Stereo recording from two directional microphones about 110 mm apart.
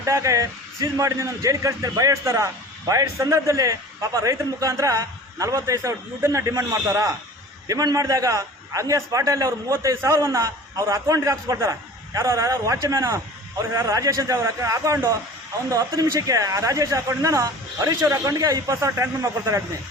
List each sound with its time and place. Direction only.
0.0 s a man's voice: 30° right (ahead or behind)